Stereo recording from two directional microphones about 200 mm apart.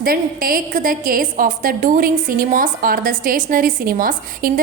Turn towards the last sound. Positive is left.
turn(degrees=-45)  # may be behind; listen again after turning